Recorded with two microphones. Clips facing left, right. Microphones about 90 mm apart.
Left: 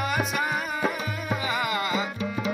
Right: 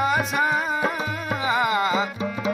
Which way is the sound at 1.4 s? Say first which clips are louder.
Right 8 dB; 30° right (ahead or behind).